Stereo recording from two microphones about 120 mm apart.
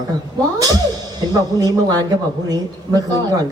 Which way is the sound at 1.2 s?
35° right (ahead or behind).